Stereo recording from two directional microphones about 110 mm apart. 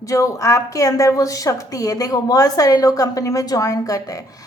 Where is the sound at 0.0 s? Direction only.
30° left (ahead or behind).